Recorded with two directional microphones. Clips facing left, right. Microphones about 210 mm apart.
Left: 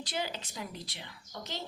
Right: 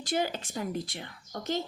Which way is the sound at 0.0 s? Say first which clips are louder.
Right 7 dB; 50° right (ahead or behind).